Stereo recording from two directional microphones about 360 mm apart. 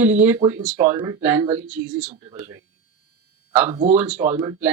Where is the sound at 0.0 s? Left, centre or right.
Centre.